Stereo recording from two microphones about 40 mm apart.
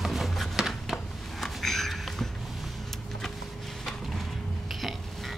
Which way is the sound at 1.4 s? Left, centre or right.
Centre.